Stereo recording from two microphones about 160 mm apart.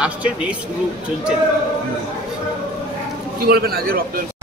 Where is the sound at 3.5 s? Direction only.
70° right (ahead or behind).